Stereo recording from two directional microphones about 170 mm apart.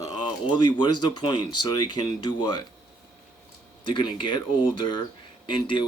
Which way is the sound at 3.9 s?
30° left (ahead or behind).